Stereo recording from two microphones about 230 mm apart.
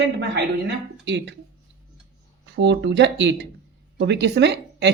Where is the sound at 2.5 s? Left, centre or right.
Right.